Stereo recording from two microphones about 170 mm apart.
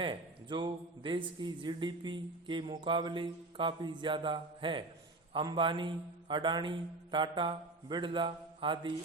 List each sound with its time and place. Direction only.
0.0 s a man's voice: 30° right (ahead or behind)